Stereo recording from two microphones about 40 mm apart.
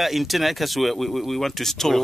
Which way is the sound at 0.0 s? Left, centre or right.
Centre.